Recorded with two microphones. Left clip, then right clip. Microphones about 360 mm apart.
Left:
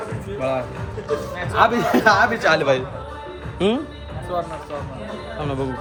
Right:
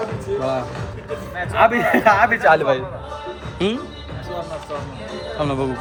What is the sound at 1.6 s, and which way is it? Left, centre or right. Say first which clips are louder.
A man's voice: right 2 dB; centre.